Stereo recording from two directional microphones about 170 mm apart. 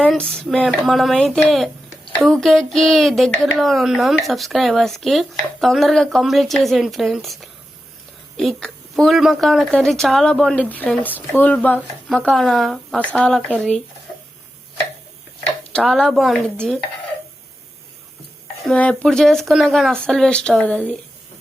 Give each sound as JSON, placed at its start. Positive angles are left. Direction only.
{"t": 0.0, "sound": "speech", "side_deg": 5}
{"t": 15.7, "sound": "speech", "side_deg": 0}
{"t": 18.6, "sound": "speech", "side_deg": 5}